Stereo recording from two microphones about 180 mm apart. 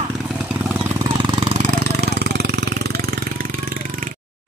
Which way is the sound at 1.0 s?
30° right (ahead or behind).